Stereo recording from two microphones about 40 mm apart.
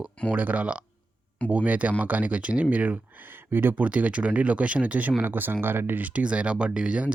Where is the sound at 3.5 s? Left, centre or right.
Right.